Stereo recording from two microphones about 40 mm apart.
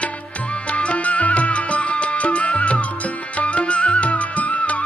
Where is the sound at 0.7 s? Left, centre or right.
Left.